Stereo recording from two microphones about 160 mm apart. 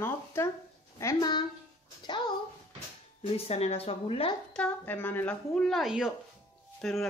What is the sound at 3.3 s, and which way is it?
Speech, 40° left (ahead or behind).